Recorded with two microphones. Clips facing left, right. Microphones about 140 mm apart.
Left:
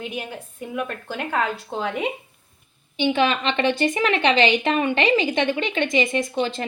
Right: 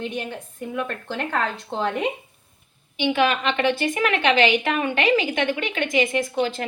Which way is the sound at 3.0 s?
30° left (ahead or behind).